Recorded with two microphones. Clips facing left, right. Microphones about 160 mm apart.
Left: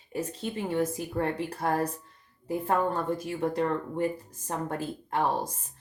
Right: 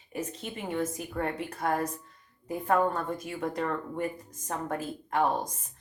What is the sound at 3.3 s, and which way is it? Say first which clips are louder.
Speech: left 4 dB; 30° left (ahead or behind).